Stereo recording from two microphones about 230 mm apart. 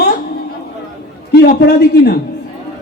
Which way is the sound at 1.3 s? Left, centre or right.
Left.